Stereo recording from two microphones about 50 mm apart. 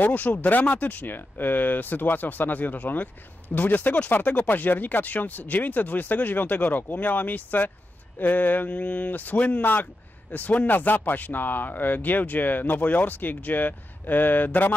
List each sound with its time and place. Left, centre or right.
0.0 s speech: left